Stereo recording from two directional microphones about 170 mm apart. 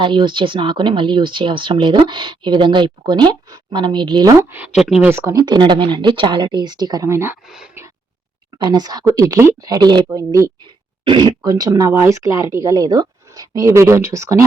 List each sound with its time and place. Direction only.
0.0 s speech: 30° right (ahead or behind)
4.8 s speech: 5° right (ahead or behind)
5.1 s speech: 20° right (ahead or behind)
8.5 s speech: 25° right (ahead or behind)